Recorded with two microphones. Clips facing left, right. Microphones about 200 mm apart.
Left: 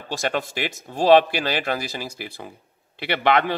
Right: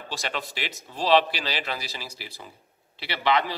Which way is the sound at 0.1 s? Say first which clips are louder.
Left 8 dB; 50° left (ahead or behind).